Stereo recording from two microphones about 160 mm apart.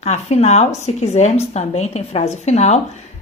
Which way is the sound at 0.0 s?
45° left (ahead or behind).